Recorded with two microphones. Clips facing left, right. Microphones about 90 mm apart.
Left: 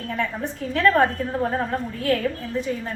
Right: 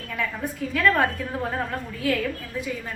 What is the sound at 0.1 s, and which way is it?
A woman's voice, 30° left (ahead or behind).